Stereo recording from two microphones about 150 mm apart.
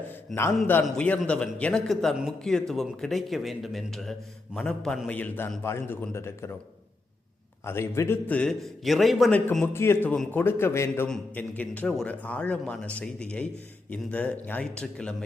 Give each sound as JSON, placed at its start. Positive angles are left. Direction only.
{"t": 0.3, "sound": "a man's voice", "side_deg": 15}
{"t": 7.6, "sound": "a man's voice", "side_deg": 15}
{"t": 9.5, "sound": "a man's voice", "side_deg": 15}